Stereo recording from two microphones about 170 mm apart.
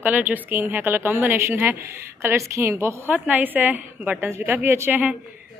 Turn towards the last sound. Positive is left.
turn(degrees=-10)  # may be behind; listen again after turning